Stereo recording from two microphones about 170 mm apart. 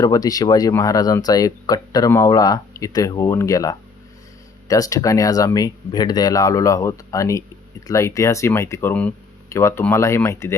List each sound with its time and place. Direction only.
0.0 s speech: 20° left (ahead or behind)